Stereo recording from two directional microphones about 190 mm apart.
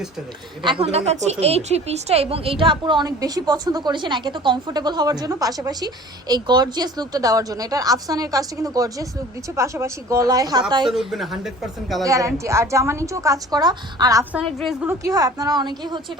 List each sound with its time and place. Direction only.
0.6 s a woman's voice: 25° right (ahead or behind)
10.8 s speech: centre (ahead or behind)
12.0 s a woman's voice: 15° right (ahead or behind)
14.3 s speech: centre (ahead or behind)
14.8 s a woman's voice: 15° right (ahead or behind)